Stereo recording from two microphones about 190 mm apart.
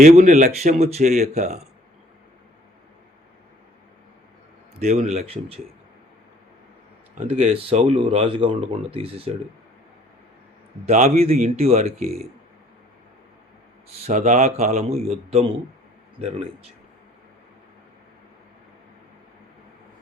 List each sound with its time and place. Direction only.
0.0 s speech: 40° right (ahead or behind)
4.8 s speech: 35° right (ahead or behind)
7.3 s speech: 35° right (ahead or behind)
10.8 s speech: 35° right (ahead or behind)
13.9 s speech: 35° right (ahead or behind)